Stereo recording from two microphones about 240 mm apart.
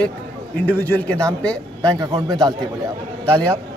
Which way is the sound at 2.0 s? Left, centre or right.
Centre.